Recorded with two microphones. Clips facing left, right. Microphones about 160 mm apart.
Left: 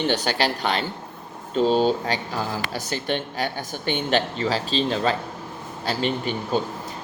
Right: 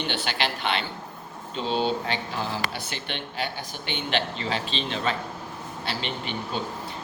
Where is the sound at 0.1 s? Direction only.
40° left (ahead or behind).